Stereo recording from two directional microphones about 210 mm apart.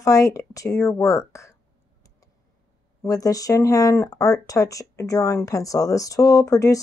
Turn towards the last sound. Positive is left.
turn(degrees=15)  # may be behind; listen again after turning